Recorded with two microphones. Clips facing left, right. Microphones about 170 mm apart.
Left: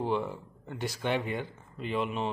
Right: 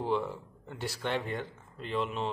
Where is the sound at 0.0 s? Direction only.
5° left (ahead or behind).